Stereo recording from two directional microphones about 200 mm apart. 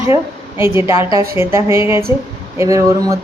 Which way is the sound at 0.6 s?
10° right (ahead or behind).